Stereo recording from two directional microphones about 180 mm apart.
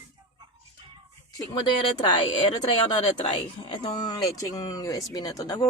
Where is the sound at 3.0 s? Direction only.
30° left (ahead or behind).